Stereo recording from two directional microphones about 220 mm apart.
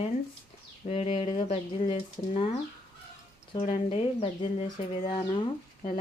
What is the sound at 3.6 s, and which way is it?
Speech, 30° left (ahead or behind).